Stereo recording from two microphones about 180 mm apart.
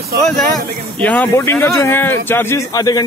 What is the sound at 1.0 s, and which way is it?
Speech, 10° left (ahead or behind).